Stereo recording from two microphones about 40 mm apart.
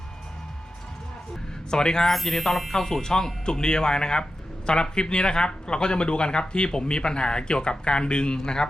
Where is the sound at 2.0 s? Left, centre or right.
Centre.